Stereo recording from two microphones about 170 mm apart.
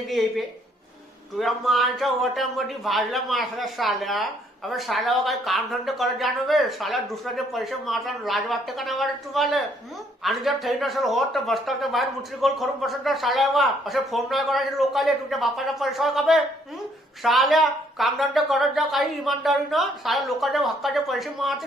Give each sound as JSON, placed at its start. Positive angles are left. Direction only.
{"t": 0.1, "sound": "a man's voice", "side_deg": 0}